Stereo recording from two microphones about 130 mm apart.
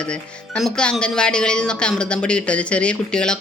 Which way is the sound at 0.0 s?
5° left (ahead or behind).